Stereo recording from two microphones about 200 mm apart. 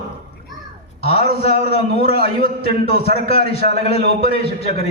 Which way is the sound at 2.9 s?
50° right (ahead or behind).